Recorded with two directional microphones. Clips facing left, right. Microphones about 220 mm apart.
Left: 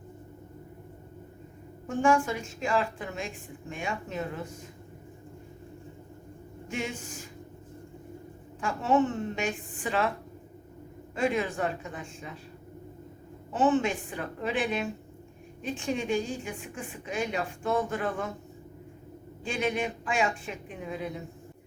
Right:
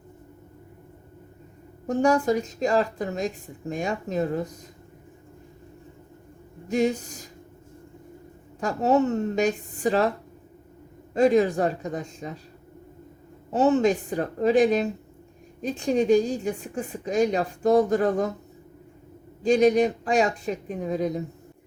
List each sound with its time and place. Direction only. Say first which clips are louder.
1.9 s speech: right 4 dB; 40° right (ahead or behind)
6.7 s speech: right 11 dB; 40° right (ahead or behind)
8.6 s speech: right 4 dB; 40° right (ahead or behind)
11.1 s speech: right 9 dB; 40° right (ahead or behind)
13.5 s speech: right 5 dB; 40° right (ahead or behind)
19.4 s speech: right 12 dB; 40° right (ahead or behind)